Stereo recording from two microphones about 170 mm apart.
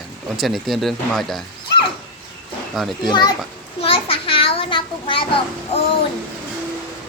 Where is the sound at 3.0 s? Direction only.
25° left (ahead or behind).